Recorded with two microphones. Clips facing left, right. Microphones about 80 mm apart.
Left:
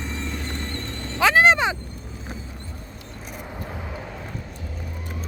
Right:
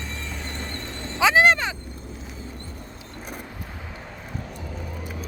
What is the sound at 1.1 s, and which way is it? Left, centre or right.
Speech, centre.